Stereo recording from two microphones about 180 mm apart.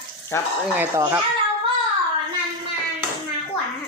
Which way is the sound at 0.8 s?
15° right (ahead or behind).